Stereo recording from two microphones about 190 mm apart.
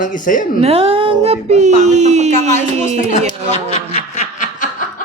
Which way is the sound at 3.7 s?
40° left (ahead or behind).